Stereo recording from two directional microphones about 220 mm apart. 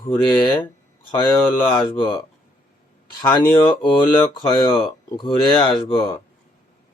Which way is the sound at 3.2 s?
15° left (ahead or behind).